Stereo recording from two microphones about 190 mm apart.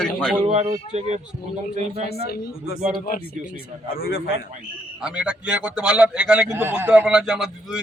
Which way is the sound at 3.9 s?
50° left (ahead or behind).